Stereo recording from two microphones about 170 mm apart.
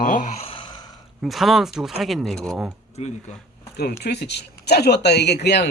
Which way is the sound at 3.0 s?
40° left (ahead or behind).